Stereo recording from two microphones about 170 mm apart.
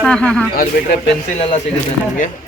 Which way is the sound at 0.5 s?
55° left (ahead or behind).